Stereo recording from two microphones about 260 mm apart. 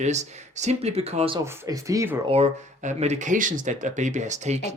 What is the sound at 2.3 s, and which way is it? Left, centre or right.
Speech, right.